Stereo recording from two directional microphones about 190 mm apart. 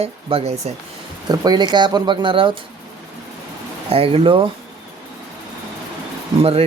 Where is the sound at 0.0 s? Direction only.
30° right (ahead or behind).